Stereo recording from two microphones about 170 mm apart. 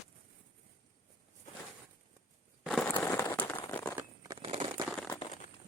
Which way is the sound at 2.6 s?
5° left (ahead or behind).